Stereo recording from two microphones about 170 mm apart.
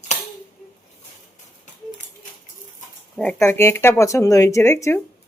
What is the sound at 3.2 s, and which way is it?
Speech, 10° left (ahead or behind).